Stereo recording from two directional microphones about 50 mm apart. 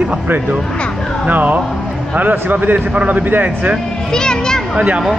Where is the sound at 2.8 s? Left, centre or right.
Right.